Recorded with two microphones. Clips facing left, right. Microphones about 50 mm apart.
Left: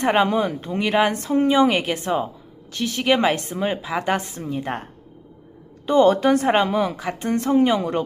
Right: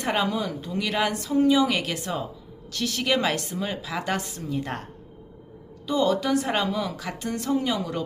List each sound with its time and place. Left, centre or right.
0.0 s a woman's voice: left
5.8 s a woman's voice: left